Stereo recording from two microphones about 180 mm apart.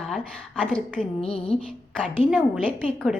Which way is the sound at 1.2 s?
30° left (ahead or behind).